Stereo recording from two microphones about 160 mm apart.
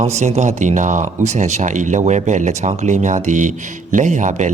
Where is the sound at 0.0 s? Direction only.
45° right (ahead or behind).